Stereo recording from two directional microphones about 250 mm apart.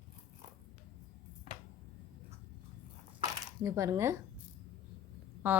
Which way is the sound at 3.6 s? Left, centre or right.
Centre.